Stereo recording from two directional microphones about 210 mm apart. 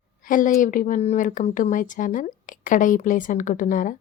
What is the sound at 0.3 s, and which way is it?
Speech, 40° left (ahead or behind).